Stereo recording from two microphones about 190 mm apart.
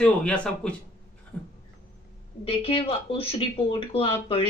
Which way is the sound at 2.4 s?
30° left (ahead or behind).